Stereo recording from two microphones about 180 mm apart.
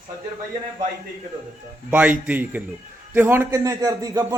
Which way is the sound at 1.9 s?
10° right (ahead or behind).